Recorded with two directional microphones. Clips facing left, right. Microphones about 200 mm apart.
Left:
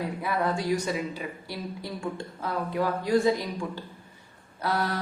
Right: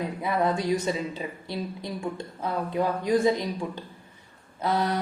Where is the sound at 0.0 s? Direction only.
20° right (ahead or behind).